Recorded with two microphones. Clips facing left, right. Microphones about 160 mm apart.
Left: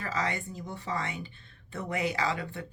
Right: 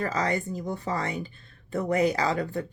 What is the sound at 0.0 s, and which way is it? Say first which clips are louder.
Speech: right 6 dB; 40° right (ahead or behind).